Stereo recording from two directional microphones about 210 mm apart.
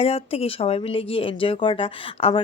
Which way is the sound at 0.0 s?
30° left (ahead or behind).